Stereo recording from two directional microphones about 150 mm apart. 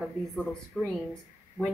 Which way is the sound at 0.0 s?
Centre (ahead or behind).